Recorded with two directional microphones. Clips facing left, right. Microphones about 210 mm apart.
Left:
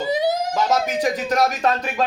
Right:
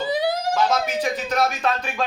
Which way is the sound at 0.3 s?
45° left (ahead or behind).